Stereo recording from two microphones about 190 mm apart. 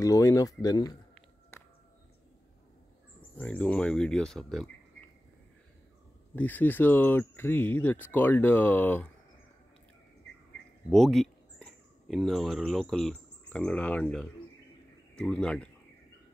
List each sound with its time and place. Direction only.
0.0 s speech: 15° left (ahead or behind)
3.3 s speech: 5° left (ahead or behind)
6.3 s speech: 10° left (ahead or behind)
10.9 s speech: centre (ahead or behind)